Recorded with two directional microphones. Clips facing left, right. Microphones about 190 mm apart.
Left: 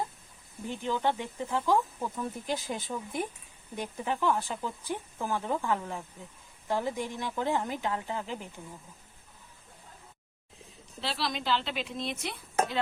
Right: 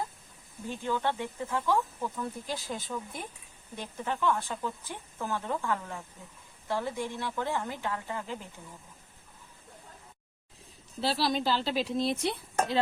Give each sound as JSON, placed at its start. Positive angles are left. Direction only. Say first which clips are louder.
{"t": 0.7, "sound": "speech", "louder": "left 1 dB", "side_deg": 15}
{"t": 11.0, "sound": "speech", "louder": "right 5 dB", "side_deg": -35}